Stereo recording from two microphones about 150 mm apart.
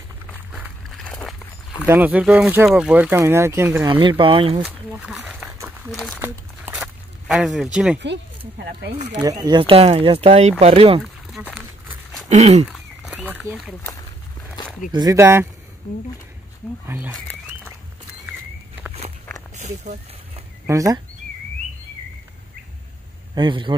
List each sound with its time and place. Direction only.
1.9 s speech: 10° right (ahead or behind)
4.2 s speech: 35° right (ahead or behind)
4.6 s a sound: 5° right (ahead or behind)
6.7 s a sound: 5° right (ahead or behind)
8.9 s speech: 45° right (ahead or behind)
9.2 s speech: 25° right (ahead or behind)
12.3 s speech: 50° right (ahead or behind)
12.6 s a sound: 5° right (ahead or behind)
14.9 s speech: 30° right (ahead or behind)
15.1 s speech: 15° right (ahead or behind)
16.8 s speech: 15° right (ahead or behind)
19.8 s a sound: 50° right (ahead or behind)
20.6 s speech: 20° right (ahead or behind)
23.3 s speech: 30° right (ahead or behind)